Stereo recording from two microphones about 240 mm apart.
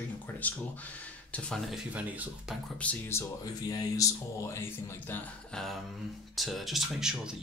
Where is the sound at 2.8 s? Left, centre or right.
Centre.